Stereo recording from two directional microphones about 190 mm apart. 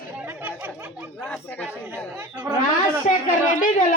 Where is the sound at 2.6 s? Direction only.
45° left (ahead or behind).